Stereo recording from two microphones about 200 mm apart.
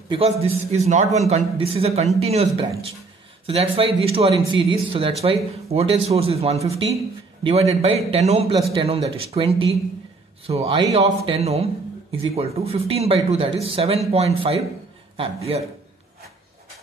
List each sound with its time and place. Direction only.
0.1 s a man's voice: 30° right (ahead or behind)